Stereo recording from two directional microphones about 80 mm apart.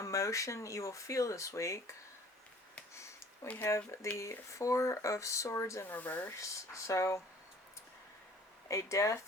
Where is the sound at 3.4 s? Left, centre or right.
Left.